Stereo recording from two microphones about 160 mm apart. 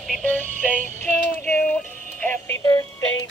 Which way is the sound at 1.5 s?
5° left (ahead or behind).